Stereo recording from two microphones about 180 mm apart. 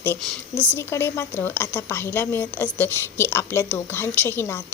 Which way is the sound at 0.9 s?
15° left (ahead or behind).